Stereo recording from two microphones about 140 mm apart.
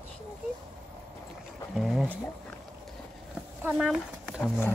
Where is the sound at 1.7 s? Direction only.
Centre (ahead or behind).